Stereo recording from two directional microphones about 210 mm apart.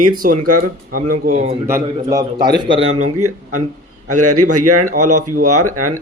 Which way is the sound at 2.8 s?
90° right.